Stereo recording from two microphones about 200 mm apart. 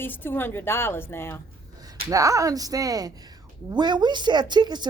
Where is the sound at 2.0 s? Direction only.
15° right (ahead or behind).